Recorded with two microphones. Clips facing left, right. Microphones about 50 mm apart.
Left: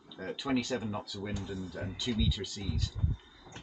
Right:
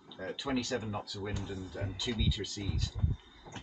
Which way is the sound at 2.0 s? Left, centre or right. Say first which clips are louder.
Left 3 dB; centre.